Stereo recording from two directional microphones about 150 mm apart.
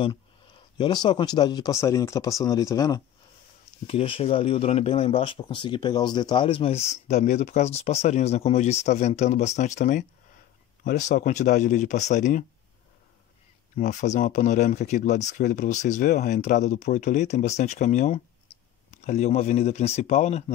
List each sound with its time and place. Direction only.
0.7 s speech: 30° left (ahead or behind)
3.8 s speech: 35° left (ahead or behind)
7.1 s speech: 50° left (ahead or behind)
13.7 s speech: 55° left (ahead or behind)